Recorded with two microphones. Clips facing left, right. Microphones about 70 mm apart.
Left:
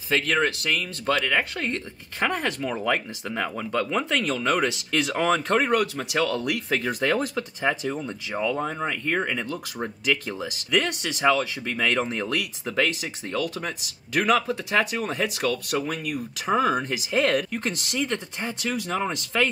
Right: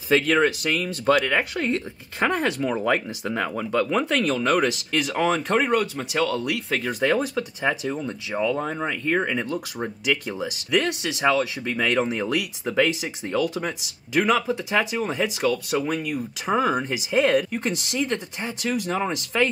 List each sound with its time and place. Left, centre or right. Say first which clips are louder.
0.1 s speech: right 4 dB; centre
14.1 s speech: right 1 dB; centre